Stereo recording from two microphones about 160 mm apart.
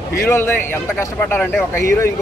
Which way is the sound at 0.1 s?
15° left (ahead or behind).